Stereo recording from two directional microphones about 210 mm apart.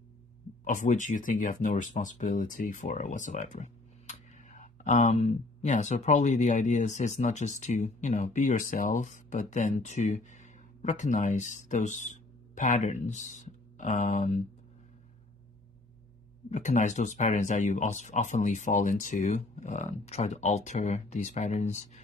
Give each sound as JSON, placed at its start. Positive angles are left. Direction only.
{"t": 0.7, "sound": "speech", "side_deg": 35}
{"t": 16.4, "sound": "speech", "side_deg": 35}